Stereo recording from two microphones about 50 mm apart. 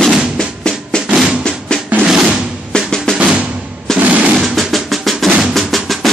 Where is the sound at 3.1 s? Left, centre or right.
Centre.